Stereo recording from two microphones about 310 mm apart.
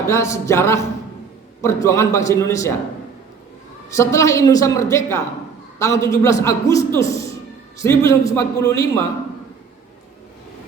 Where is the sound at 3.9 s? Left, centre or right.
Centre.